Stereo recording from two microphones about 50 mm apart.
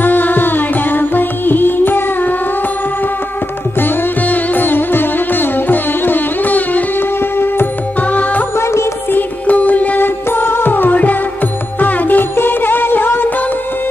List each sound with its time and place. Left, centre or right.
0.0 s carnatic music: left
3.8 s music: left
8.1 s music: left
9.5 s music: left